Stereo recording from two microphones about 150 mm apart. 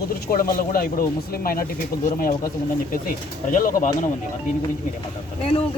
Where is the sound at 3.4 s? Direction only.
65° left (ahead or behind).